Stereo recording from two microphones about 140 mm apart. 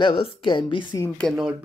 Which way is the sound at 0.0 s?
40° left (ahead or behind).